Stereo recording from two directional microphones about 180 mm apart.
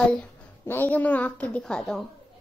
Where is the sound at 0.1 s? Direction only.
10° left (ahead or behind).